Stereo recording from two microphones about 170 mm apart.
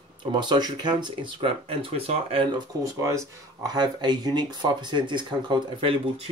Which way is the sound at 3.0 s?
20° right (ahead or behind).